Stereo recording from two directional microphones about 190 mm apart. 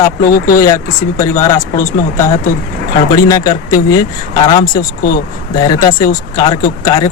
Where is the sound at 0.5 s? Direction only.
15° left (ahead or behind).